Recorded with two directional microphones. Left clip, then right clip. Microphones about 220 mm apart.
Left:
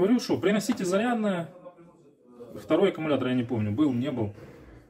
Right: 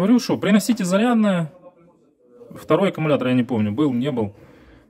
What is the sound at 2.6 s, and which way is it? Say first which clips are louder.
A man's voice: right 5 dB; 55° right (ahead or behind).